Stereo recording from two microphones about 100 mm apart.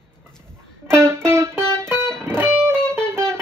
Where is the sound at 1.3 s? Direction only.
25° right (ahead or behind).